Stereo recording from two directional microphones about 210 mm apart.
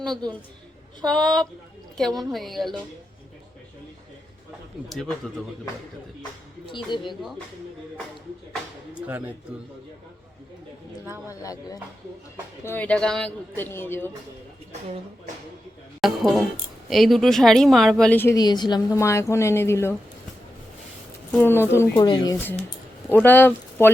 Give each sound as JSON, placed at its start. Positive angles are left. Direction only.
{"t": 1.0, "sound": "a woman's voice", "side_deg": 5}
{"t": 4.9, "sound": "a woman's voice", "side_deg": 0}
{"t": 6.7, "sound": "speech", "side_deg": 20}
{"t": 9.0, "sound": "speech", "side_deg": -10}
{"t": 11.3, "sound": "speech", "side_deg": 15}
{"t": 16.0, "sound": "speech", "side_deg": 0}
{"t": 21.4, "sound": "speech", "side_deg": 10}
{"t": 21.9, "sound": "speech", "side_deg": 20}